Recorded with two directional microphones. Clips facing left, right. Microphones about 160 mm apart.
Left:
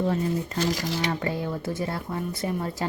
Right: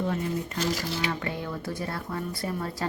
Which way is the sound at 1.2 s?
25° left (ahead or behind).